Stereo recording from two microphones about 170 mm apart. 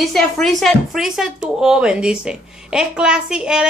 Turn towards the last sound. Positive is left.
turn(degrees=-5)  # may be behind; listen again after turning